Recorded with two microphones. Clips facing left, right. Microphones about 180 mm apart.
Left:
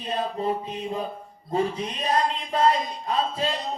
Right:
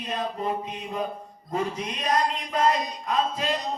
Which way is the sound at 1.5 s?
30° left (ahead or behind).